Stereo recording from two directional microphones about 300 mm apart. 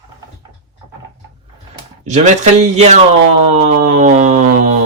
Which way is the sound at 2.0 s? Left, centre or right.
Right.